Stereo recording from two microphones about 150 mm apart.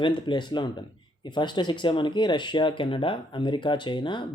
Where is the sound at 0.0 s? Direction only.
30° left (ahead or behind).